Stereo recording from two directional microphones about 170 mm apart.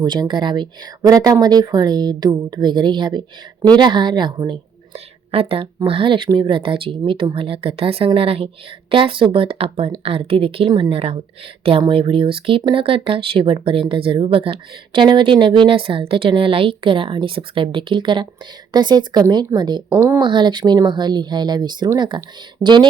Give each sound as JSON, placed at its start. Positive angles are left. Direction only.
{"t": 0.0, "sound": "speech", "side_deg": -25}